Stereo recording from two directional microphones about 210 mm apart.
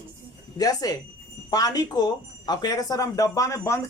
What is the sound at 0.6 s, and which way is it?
Speech, 15° left (ahead or behind).